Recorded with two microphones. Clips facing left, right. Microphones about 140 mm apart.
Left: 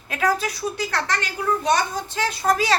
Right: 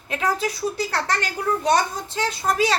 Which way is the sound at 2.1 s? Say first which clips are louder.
Even; 25° right (ahead or behind).